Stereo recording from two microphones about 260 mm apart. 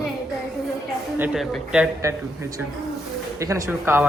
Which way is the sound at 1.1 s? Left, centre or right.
Centre.